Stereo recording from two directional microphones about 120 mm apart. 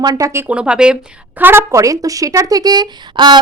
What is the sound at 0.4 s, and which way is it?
A woman's voice, 10° right (ahead or behind).